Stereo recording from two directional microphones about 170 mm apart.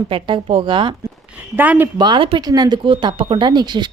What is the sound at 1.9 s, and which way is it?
Speech, 25° right (ahead or behind).